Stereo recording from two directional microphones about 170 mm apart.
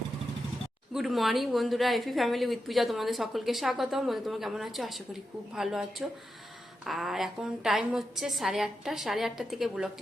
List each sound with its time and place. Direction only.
0.9 s a woman's voice: centre (ahead or behind)